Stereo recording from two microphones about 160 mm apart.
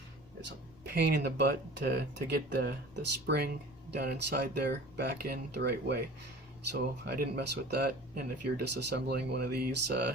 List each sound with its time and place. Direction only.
0.9 s speech: 85° right